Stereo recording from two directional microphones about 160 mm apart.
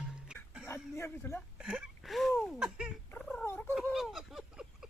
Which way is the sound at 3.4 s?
15° left (ahead or behind).